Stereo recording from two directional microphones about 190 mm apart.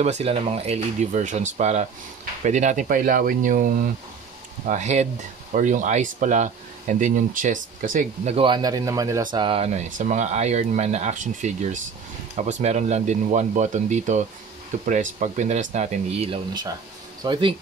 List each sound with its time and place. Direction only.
0.0 s speech: 35° right (ahead or behind)
8.4 s speech: 25° right (ahead or behind)